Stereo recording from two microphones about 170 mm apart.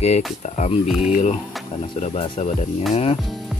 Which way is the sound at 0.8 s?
Centre (ahead or behind).